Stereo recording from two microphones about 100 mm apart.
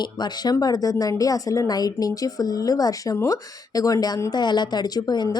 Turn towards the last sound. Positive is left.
turn(degrees=45)  # may be behind; listen again after turning